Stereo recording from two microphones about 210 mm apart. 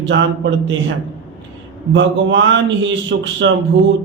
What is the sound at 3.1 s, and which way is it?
Speech, 50° right (ahead or behind).